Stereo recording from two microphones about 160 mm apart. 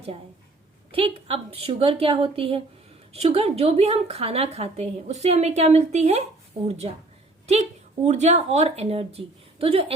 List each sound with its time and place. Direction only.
0.9 s a woman's voice: 35° right (ahead or behind)
8.0 s a woman's voice: 45° right (ahead or behind)